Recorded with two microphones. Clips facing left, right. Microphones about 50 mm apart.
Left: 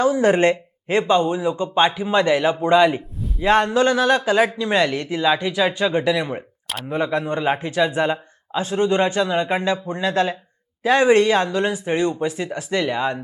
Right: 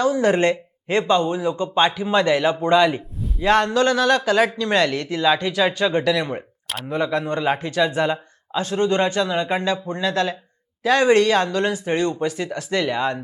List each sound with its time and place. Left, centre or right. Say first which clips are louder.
0.0 s a man's voice: left 2 dB; left
3.2 s a sound: even; centre
3.4 s a man's voice: left 1 dB; centre
6.9 s a man's voice: even; centre